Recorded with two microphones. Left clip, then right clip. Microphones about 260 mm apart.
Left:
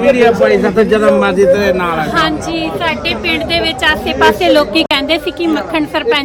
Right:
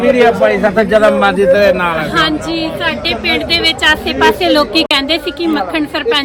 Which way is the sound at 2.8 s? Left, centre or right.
Centre.